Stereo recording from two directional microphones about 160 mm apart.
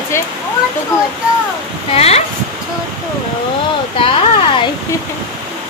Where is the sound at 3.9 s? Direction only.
35° left (ahead or behind).